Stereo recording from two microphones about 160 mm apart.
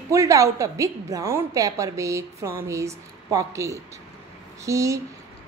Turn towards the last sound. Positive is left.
turn(degrees=-20)  # may be behind; listen again after turning